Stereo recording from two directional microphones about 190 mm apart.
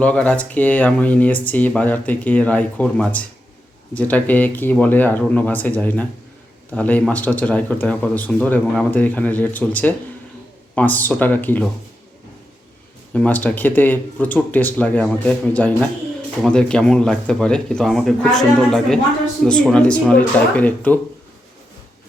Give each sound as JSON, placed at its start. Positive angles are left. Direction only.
{"t": 0.0, "sound": "speech", "side_deg": 5}
{"t": 13.1, "sound": "speech", "side_deg": 10}